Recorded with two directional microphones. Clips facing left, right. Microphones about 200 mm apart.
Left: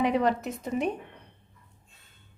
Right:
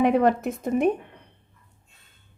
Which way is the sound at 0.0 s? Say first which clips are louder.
Right 5 dB; 55° right (ahead or behind).